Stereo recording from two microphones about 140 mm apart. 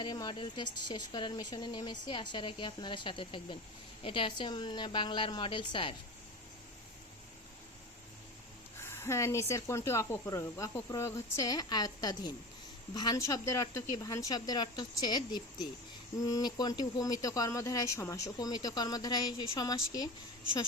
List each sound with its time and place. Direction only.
0.0 s speech: 30° left (ahead or behind)
8.8 s speech: 20° left (ahead or behind)